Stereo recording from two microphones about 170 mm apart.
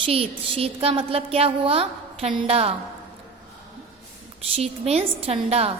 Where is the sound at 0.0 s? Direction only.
35° right (ahead or behind).